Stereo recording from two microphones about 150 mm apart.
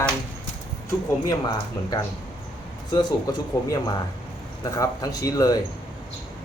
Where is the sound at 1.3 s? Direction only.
25° left (ahead or behind).